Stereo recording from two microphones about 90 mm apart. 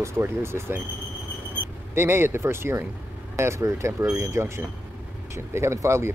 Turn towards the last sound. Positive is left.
turn(degrees=-30)  # may be behind; listen again after turning